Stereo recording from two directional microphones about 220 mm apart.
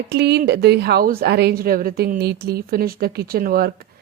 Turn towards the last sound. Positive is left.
turn(degrees=-45)  # may be behind; listen again after turning